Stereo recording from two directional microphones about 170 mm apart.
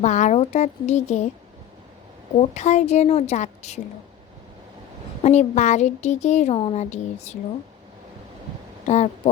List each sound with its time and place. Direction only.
0.0 s speech: 45° left (ahead or behind)
2.4 s speech: 40° left (ahead or behind)
5.2 s speech: 40° left (ahead or behind)
8.9 s speech: 45° left (ahead or behind)